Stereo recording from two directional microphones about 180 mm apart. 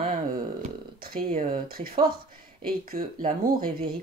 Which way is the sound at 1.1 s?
50° right (ahead or behind).